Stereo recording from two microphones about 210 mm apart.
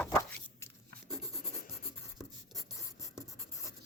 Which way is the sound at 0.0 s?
10° left (ahead or behind).